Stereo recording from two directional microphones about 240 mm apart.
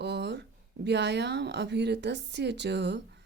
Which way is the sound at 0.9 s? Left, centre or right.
Right.